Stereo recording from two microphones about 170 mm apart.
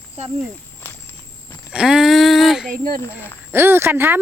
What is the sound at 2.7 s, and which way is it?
Speech, 60° right (ahead or behind).